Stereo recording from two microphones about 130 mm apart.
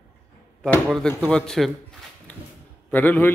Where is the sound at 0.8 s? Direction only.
Centre (ahead or behind).